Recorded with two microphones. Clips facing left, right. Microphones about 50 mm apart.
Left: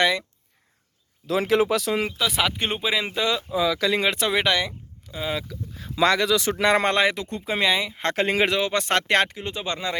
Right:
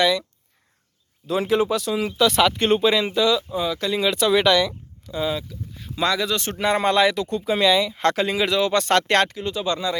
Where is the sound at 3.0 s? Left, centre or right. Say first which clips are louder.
Right 5 dB; left.